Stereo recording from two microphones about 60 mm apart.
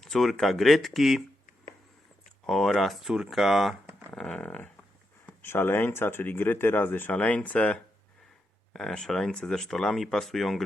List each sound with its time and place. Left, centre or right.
0.0 s speech: centre
2.5 s speech: centre
4.1 s a sound: centre
4.4 s a sound: left
5.4 s speech: left
8.7 s speech: centre